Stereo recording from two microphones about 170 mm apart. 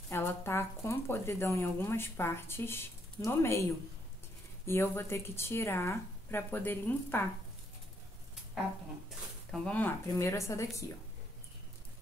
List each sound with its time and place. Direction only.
0.1 s speech: 15° left (ahead or behind)
4.6 s speech: 15° left (ahead or behind)
9.5 s speech: 10° left (ahead or behind)